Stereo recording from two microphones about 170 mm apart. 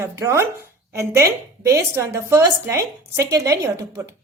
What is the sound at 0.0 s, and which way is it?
A woman's voice, 15° right (ahead or behind).